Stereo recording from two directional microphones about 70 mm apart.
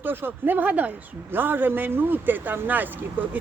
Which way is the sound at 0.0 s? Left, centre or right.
Right.